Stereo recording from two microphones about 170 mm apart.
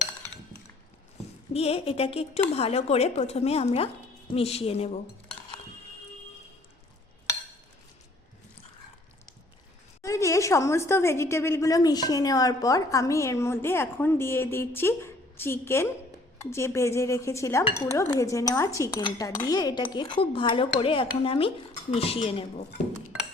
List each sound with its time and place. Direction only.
1.5 s speech: 35° left (ahead or behind)
10.0 s a woman's voice: 15° left (ahead or behind); by 22.4 s 35° left (ahead or behind)